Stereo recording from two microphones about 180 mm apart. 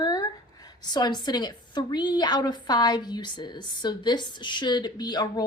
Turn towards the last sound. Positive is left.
turn(degrees=20)  # may be behind; listen again after turning